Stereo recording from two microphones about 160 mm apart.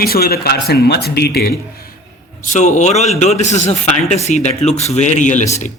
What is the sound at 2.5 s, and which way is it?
A man's voice, 50° left (ahead or behind).